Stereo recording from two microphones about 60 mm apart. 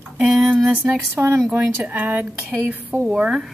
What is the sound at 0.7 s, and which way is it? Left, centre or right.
A woman's voice, right.